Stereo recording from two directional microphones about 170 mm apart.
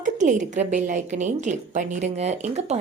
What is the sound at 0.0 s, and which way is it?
A woman's voice, 45° right (ahead or behind).